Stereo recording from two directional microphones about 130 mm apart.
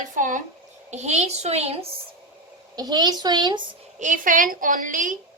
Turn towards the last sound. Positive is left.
turn(degrees=-85)